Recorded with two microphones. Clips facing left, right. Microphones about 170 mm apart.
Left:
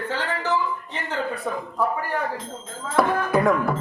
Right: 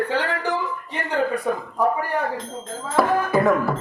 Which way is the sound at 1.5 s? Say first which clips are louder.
Right 4 dB; 15° right (ahead or behind).